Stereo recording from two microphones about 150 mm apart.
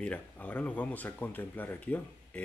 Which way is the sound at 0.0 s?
10° left (ahead or behind).